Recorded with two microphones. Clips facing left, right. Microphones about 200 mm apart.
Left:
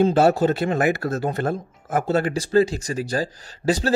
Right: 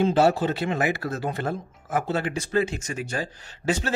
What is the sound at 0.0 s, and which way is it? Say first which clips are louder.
Speech: left 3 dB; 45° left (ahead or behind).